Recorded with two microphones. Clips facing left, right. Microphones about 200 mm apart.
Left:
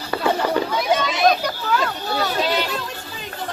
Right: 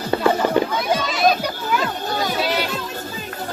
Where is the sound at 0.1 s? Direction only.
30° right (ahead or behind).